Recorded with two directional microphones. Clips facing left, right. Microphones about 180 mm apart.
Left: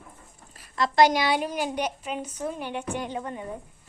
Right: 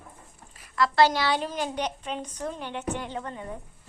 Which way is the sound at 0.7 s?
20° left (ahead or behind).